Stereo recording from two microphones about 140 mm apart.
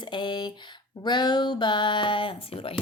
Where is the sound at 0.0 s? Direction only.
35° left (ahead or behind).